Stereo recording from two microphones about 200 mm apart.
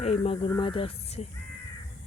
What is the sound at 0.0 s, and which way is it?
Speech, 30° left (ahead or behind).